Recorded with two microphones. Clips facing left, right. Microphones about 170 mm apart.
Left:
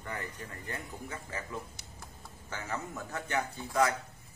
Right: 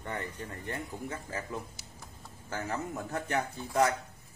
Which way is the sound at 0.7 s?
30° right (ahead or behind).